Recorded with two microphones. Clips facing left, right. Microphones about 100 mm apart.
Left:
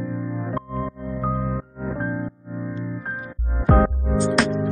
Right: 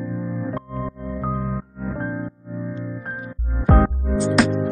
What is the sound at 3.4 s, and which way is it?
Music, centre (ahead or behind).